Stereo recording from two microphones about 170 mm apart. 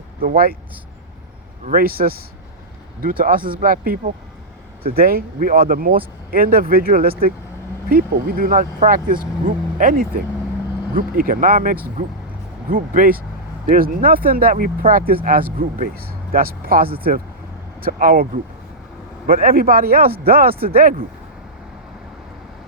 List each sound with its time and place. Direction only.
0.2 s speech: 60° right (ahead or behind)
1.6 s speech: 60° right (ahead or behind)
19.3 s speech: 60° right (ahead or behind)